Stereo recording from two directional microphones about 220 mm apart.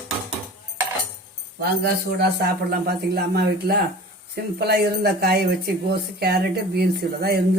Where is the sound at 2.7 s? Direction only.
45° right (ahead or behind).